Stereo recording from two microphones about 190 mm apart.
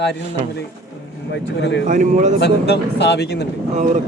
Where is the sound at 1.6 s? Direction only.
65° left (ahead or behind).